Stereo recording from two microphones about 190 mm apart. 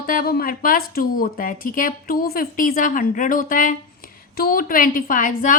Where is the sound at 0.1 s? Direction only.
50° left (ahead or behind).